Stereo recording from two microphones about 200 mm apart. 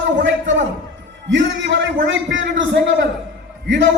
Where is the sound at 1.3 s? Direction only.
65° right (ahead or behind).